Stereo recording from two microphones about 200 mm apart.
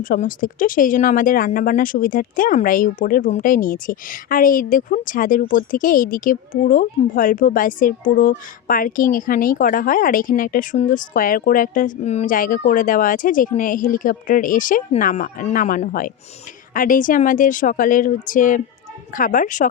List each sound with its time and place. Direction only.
0.0 s a woman's voice: 45° left (ahead or behind)